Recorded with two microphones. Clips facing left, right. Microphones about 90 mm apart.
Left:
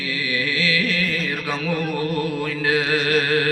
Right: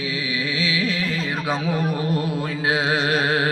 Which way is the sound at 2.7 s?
20° right (ahead or behind).